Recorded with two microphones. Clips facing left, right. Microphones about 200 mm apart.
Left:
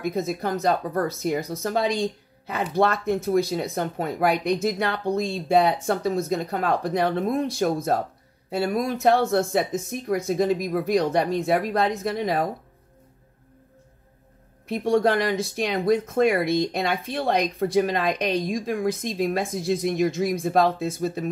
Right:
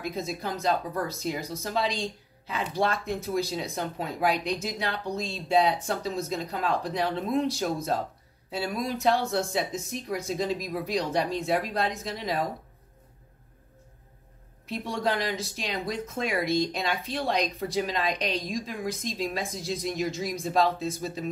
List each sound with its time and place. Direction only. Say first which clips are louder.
0.0 s speech: left 6 dB; 55° left (ahead or behind)
14.7 s speech: left 8 dB; 55° left (ahead or behind)